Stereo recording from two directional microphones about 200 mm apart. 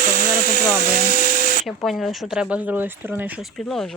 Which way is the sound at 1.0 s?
40° right (ahead or behind).